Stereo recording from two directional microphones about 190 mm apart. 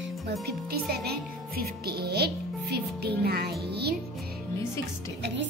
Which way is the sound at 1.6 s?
55° right (ahead or behind).